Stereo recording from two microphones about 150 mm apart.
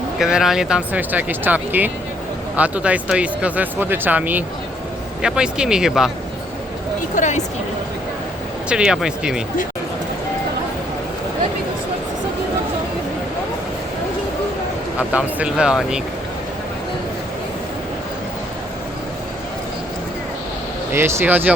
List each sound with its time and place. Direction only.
0.2 s speech: 5° right (ahead or behind)
7.2 s speech: 55° left (ahead or behind)
8.7 s speech: 5° right (ahead or behind)
14.9 s speech: 10° right (ahead or behind)
20.9 s speech: 15° right (ahead or behind)